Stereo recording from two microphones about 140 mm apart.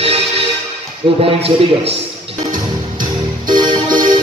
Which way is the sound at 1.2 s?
45° right (ahead or behind).